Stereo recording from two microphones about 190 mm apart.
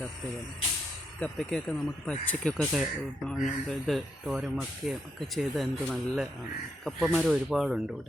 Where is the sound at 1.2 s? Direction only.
5° left (ahead or behind).